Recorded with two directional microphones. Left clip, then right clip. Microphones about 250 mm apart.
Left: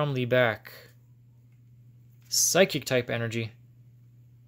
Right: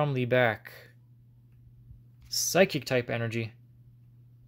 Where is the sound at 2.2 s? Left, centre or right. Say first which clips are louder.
Left 2 dB; centre.